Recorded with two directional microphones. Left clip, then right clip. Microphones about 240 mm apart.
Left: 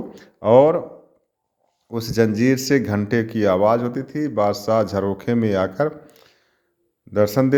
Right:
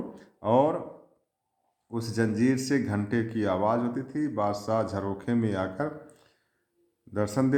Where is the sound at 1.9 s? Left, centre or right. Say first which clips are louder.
Left 10 dB; left.